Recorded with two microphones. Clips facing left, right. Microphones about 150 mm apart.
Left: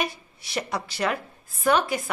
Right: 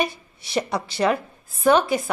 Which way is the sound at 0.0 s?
25° right (ahead or behind).